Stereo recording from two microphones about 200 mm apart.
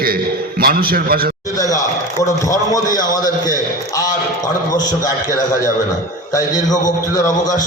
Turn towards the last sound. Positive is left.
turn(degrees=20)  # may be behind; listen again after turning